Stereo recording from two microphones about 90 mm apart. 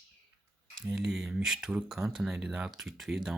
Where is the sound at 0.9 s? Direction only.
5° right (ahead or behind).